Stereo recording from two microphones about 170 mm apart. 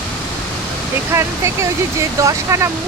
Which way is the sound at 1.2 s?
15° right (ahead or behind).